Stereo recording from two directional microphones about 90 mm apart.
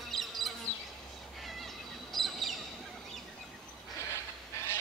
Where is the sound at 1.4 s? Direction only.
Centre (ahead or behind).